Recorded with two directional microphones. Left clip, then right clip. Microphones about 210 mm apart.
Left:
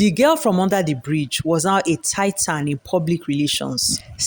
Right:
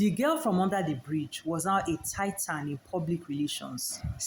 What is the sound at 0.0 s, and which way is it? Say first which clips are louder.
Speech: left 12 dB; 45° left (ahead or behind).